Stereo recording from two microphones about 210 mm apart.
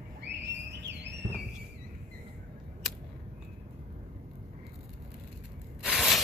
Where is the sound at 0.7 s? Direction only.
55° right (ahead or behind).